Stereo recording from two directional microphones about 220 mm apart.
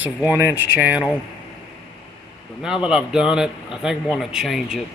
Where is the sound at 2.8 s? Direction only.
5° right (ahead or behind).